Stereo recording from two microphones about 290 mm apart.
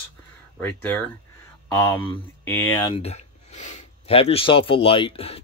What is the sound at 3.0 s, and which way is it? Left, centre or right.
Speech, left.